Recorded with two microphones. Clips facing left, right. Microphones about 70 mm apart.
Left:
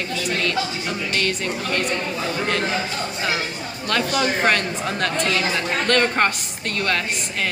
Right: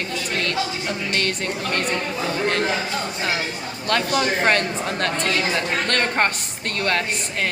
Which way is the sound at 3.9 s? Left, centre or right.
Right.